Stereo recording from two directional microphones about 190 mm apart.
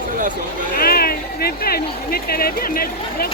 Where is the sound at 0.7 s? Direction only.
50° left (ahead or behind).